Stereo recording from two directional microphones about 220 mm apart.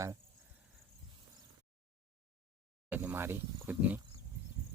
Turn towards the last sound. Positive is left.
turn(degrees=-10)  # may be behind; listen again after turning